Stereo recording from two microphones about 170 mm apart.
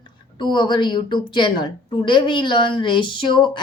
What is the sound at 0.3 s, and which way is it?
A woman's voice, 25° left (ahead or behind).